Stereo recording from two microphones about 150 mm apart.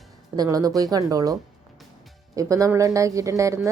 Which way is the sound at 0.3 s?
25° right (ahead or behind).